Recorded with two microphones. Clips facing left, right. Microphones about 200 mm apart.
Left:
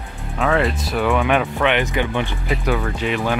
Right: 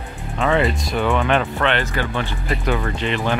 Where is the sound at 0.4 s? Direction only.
Centre (ahead or behind); by 2.3 s 15° left (ahead or behind).